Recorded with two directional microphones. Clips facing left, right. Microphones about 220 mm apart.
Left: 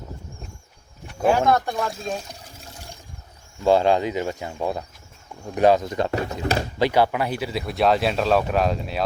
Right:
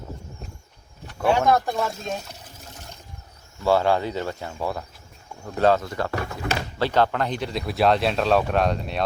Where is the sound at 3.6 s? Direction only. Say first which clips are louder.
Left 2 dB; 20° left (ahead or behind).